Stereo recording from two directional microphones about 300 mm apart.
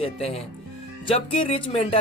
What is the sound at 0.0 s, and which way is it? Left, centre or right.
Speech, centre.